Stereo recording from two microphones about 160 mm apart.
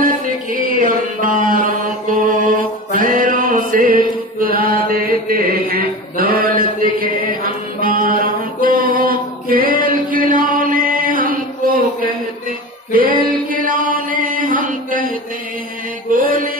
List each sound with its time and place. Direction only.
0.0 s music: 60° right (ahead or behind)
0.7 s mantra: 55° right (ahead or behind)
2.9 s music: 55° right (ahead or behind)
4.8 s mantra: 65° right (ahead or behind)
13.2 s chant: 60° right (ahead or behind)
16.1 s mantra: 60° right (ahead or behind)